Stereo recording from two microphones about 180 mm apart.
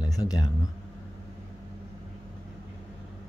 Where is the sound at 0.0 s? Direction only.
20° left (ahead or behind).